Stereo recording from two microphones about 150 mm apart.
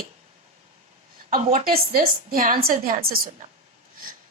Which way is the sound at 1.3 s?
75° right (ahead or behind).